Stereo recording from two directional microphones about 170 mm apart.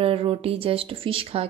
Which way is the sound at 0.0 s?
35° right (ahead or behind).